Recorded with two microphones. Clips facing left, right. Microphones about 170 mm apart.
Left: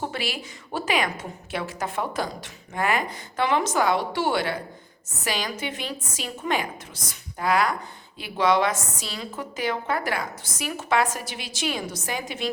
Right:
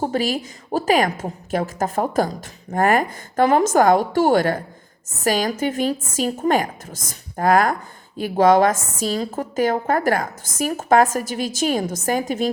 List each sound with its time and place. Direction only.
0.0 s a woman's voice: 40° right (ahead or behind)